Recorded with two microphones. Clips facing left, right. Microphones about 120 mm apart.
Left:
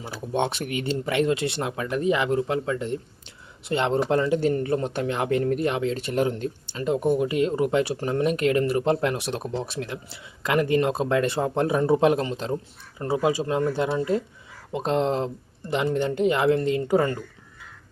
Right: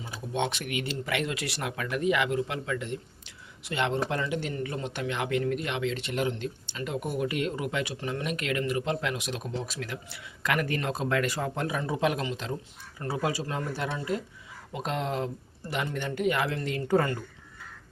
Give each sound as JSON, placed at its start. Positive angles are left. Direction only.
{"t": 0.3, "sound": "speech", "side_deg": 40}
{"t": 13.0, "sound": "speech", "side_deg": 25}